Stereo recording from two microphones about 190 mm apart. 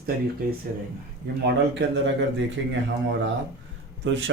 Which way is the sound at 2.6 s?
80° right.